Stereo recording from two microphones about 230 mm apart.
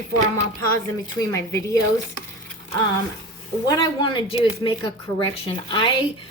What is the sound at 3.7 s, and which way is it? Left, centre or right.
A woman's voice, centre.